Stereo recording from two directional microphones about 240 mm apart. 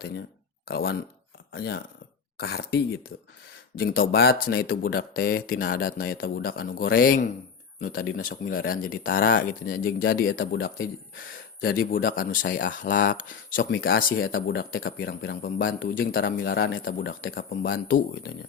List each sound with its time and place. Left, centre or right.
0.7 s speech: left
16.2 s speech: left